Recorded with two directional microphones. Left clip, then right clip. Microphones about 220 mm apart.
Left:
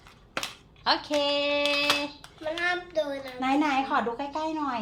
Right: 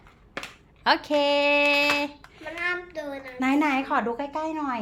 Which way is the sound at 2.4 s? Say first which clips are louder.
Left 1 dB; 15° right (ahead or behind).